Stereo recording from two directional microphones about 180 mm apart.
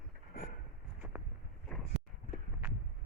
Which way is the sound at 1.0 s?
10° right (ahead or behind).